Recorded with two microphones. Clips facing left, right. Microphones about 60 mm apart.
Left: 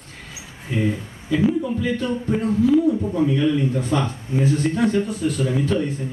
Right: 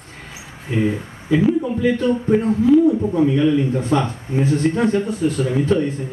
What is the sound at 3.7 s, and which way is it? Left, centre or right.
Speech, right.